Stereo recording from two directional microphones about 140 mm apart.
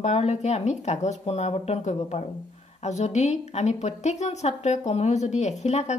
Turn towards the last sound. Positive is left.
turn(degrees=55)  # may be behind; listen again after turning